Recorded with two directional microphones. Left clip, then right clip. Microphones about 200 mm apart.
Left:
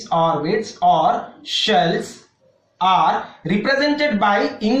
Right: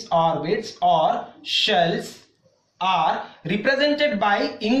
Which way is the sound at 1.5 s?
35° right (ahead or behind).